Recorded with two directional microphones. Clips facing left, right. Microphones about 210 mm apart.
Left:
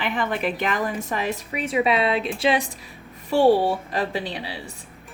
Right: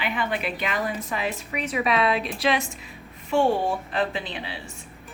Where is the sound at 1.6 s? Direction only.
30° left (ahead or behind).